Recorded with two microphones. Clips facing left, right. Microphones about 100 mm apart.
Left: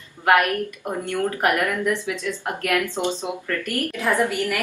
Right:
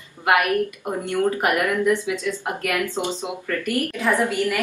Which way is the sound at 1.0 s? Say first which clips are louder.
Right 1 dB; 15° right (ahead or behind).